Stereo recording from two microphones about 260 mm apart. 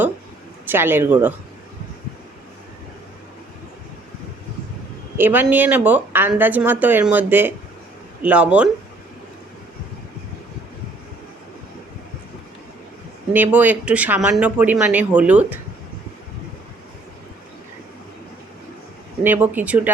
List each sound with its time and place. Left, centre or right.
0.6 s speech: centre
5.1 s speech: centre
13.3 s speech: centre
19.2 s speech: centre